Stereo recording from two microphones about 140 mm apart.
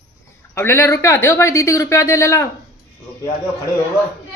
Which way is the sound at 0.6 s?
15° left (ahead or behind).